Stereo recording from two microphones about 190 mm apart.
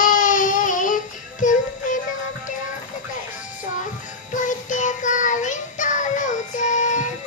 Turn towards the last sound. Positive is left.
turn(degrees=40)  # may be behind; listen again after turning